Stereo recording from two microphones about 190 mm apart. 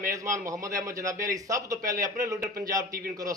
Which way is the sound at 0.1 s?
15° right (ahead or behind).